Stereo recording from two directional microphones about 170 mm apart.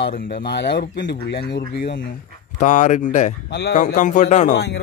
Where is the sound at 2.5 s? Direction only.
45° left (ahead or behind).